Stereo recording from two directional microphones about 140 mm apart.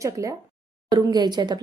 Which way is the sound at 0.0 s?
20° right (ahead or behind).